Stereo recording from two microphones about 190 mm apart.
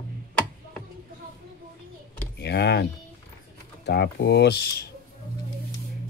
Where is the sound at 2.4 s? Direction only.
65° left (ahead or behind).